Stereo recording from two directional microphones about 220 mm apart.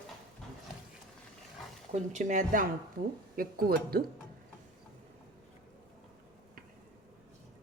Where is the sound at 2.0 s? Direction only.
35° right (ahead or behind).